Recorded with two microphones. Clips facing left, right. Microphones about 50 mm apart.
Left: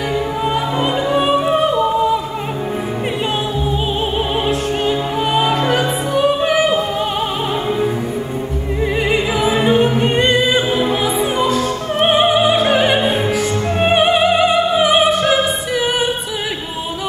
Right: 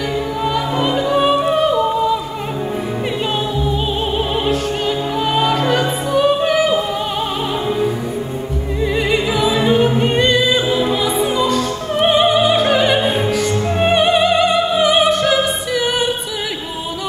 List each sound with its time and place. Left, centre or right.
0.8 s opera: left
1.1 s music: centre
5.2 s music: centre
5.8 s opera: centre
8.8 s opera: left
10.1 s opera: left
12.1 s music: left
13.0 s opera: centre